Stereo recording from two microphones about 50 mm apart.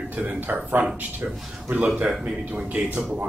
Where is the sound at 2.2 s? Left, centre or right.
Right.